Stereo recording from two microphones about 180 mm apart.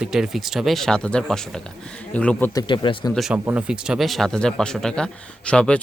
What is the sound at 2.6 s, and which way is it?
Speech, 25° left (ahead or behind).